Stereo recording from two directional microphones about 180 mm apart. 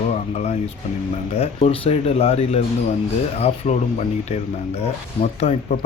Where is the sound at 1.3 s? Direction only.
35° left (ahead or behind).